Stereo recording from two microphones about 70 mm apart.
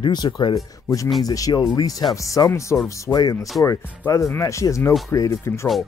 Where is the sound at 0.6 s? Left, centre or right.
Left.